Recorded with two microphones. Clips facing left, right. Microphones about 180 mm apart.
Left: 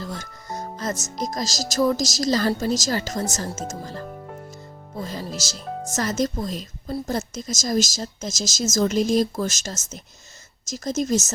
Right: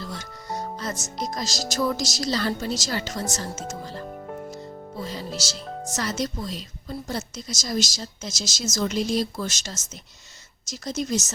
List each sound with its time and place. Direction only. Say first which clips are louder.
0.0 s speech: left 2 dB; 45° left (ahead or behind)